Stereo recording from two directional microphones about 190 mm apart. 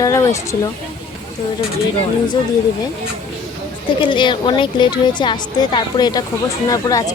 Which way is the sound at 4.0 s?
25° left (ahead or behind).